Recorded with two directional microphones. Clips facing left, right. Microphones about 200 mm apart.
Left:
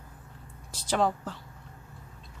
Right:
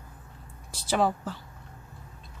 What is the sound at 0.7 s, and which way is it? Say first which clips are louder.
Speech: right 1 dB; 10° right (ahead or behind).